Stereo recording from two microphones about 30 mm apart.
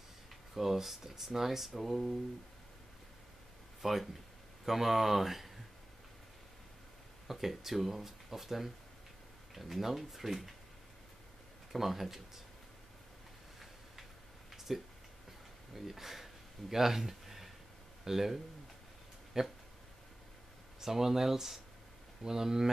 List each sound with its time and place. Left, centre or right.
0.6 s speech: centre
3.8 s speech: centre
7.2 s speech: centre
11.7 s speech: centre
14.5 s a sound: centre
15.7 s speech: centre
20.8 s speech: centre